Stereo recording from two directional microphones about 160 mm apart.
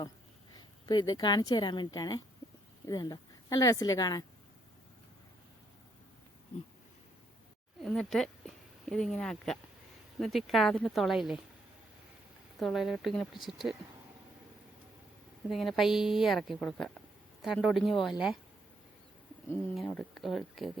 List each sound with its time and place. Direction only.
0.9 s a woman's voice: 25° left (ahead or behind)
7.8 s a woman's voice: centre (ahead or behind)
12.5 s a woman's voice: centre (ahead or behind)
15.4 s a woman's voice: centre (ahead or behind)
19.9 s a woman's voice: 5° left (ahead or behind)